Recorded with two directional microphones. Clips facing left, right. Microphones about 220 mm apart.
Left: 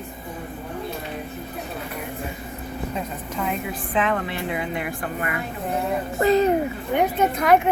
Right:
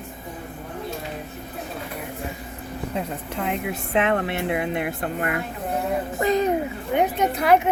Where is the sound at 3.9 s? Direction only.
65° right (ahead or behind).